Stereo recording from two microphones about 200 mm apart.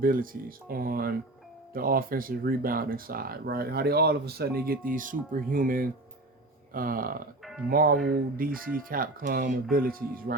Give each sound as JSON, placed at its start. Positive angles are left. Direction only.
{"t": 0.0, "sound": "speech", "side_deg": -45}